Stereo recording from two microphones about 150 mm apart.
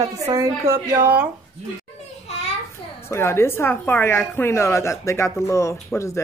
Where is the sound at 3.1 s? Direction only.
15° left (ahead or behind).